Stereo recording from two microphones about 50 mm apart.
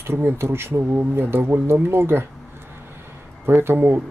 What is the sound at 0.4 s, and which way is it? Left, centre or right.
Speech, right.